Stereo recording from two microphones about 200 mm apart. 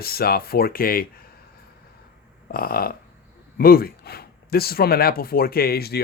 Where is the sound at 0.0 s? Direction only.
50° left (ahead or behind).